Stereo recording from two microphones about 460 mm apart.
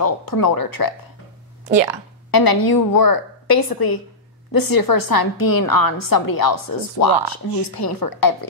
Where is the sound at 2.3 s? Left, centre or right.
Left.